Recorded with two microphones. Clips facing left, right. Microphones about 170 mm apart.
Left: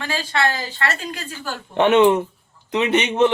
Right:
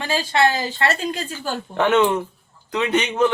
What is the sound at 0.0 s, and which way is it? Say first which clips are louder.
A woman's voice: right 3 dB; 15° right (ahead or behind).